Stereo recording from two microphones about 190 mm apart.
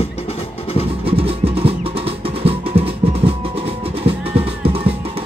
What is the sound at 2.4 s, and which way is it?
Music, 30° right (ahead or behind).